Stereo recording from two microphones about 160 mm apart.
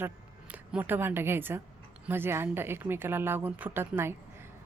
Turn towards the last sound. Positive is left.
turn(degrees=-15)  # may be behind; listen again after turning